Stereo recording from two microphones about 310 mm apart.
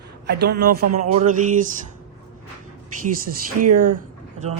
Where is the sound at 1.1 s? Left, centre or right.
Right.